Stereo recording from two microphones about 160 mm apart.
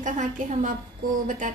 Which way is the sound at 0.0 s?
50° right (ahead or behind).